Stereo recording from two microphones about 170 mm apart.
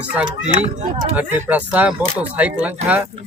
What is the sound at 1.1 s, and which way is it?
Speech, 10° right (ahead or behind).